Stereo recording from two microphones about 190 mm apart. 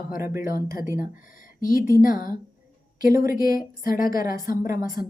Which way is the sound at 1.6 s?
45° left (ahead or behind).